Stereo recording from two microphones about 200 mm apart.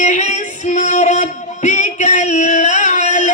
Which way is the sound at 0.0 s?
35° left (ahead or behind).